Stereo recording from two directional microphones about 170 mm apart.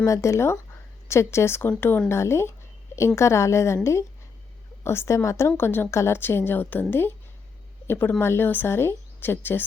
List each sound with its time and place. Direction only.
0.0 s a woman's voice: 20° left (ahead or behind)
4.8 s a woman's voice: 15° left (ahead or behind)
7.9 s a woman's voice: 15° left (ahead or behind)